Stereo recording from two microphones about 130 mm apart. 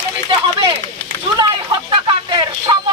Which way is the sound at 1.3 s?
40° right (ahead or behind).